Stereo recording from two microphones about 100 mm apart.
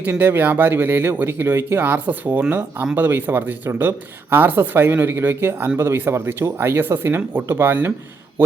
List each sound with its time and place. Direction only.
0.0 s speech: 20° right (ahead or behind)